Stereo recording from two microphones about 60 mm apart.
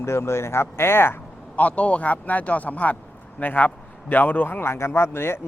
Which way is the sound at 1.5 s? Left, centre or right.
Left.